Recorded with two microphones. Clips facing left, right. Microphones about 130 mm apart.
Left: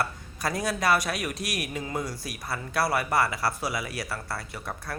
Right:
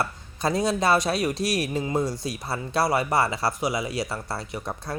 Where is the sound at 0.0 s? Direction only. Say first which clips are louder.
Right 3 dB; 25° right (ahead or behind).